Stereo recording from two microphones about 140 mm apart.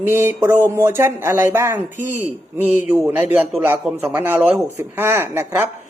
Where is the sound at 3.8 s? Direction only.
5° right (ahead or behind).